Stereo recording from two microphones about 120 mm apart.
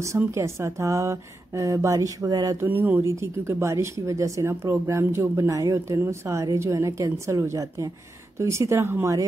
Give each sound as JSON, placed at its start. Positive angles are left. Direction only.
{"t": 0.3, "sound": "a woman's voice", "side_deg": -25}